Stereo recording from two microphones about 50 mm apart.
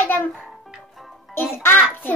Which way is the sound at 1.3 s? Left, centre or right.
Left.